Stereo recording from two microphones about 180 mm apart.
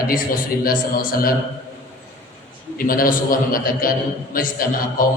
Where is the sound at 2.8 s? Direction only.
50° left (ahead or behind).